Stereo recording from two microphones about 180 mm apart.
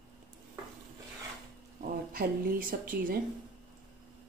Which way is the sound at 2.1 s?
50° right (ahead or behind).